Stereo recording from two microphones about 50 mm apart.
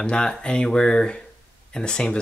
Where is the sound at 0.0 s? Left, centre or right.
Centre.